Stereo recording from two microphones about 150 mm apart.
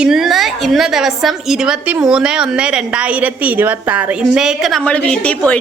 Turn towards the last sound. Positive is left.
turn(degrees=10)  # may be behind; listen again after turning